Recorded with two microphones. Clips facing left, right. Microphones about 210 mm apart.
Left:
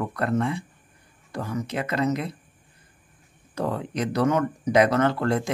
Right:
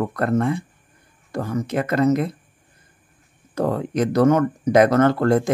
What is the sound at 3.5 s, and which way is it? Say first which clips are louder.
Speech: right 6 dB; 45° right (ahead or behind).